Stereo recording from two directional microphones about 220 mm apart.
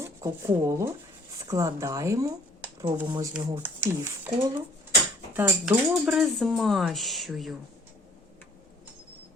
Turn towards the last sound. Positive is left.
turn(degrees=0)  # may be behind; listen again after turning